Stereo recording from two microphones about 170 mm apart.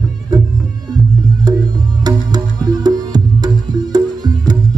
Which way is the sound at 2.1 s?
25° right (ahead or behind).